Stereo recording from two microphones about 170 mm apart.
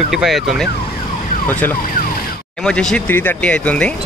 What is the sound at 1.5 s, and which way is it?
Speech, 10° left (ahead or behind).